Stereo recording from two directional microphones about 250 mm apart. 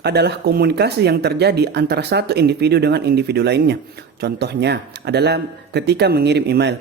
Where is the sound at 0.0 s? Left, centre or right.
Right.